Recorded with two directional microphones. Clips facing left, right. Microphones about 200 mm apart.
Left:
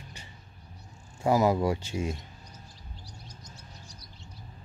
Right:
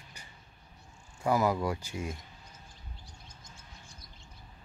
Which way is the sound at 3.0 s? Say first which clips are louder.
Left 5 dB; 40° left (ahead or behind).